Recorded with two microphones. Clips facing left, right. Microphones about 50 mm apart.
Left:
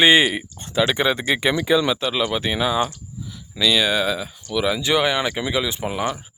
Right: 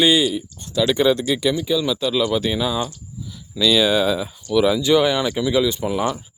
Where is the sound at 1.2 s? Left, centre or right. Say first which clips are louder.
Even; left.